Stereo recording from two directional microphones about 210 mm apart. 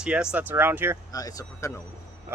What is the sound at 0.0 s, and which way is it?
Speech, 5° right (ahead or behind).